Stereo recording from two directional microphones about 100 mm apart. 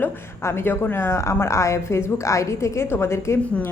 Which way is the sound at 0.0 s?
25° left (ahead or behind).